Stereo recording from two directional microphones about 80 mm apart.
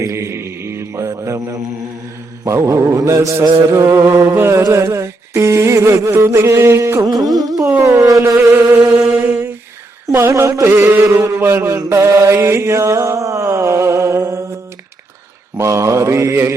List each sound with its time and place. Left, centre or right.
0.0 s mantra: right
2.9 s middle eastern music: right
4.6 s a sound: right
6.4 s middle eastern music: right
7.0 s carnatic music: right
8.4 s music: right
10.2 s middle eastern music: right
11.3 s mantra: right
15.5 s mantra: right